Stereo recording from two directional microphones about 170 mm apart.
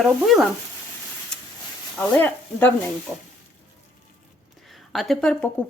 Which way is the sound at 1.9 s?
10° left (ahead or behind).